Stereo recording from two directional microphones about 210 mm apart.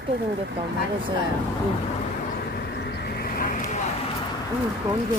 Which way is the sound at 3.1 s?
45° left (ahead or behind).